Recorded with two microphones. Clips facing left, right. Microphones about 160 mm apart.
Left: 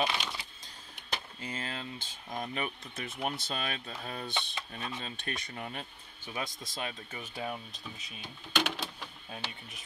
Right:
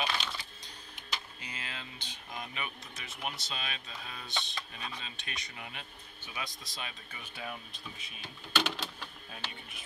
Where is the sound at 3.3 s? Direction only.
50° left (ahead or behind).